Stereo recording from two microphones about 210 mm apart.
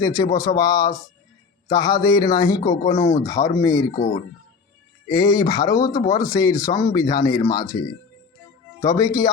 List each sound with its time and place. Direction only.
0.0 s speech: 15° left (ahead or behind)
5.0 s speech: 20° left (ahead or behind)
8.8 s speech: 15° left (ahead or behind)